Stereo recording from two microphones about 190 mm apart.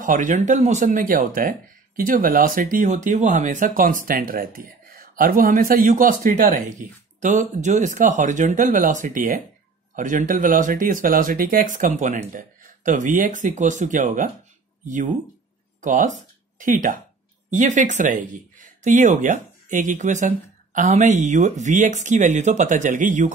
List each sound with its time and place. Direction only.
0.0 s speech: 45° right (ahead or behind)